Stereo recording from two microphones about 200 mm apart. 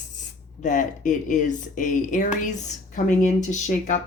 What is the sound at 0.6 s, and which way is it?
A woman's voice, 40° left (ahead or behind).